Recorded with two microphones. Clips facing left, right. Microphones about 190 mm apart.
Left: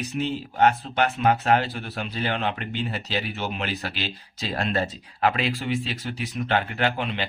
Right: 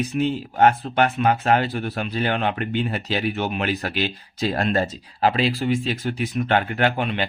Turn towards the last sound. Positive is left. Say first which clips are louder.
# right 4 dB
turn(degrees=-55)  # may be behind; listen again after turning